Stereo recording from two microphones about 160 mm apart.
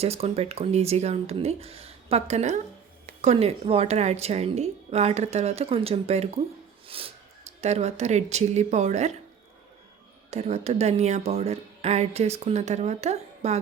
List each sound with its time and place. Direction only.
0.0 s a woman's voice: 40° right (ahead or behind)
6.8 s a sound: 35° right (ahead or behind)
7.6 s speech: 40° right (ahead or behind)
10.2 s speech: 40° right (ahead or behind)